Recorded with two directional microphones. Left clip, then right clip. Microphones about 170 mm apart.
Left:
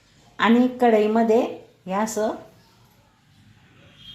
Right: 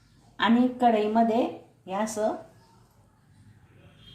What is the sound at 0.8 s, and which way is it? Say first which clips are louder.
Speech: left 3 dB; 35° left (ahead or behind).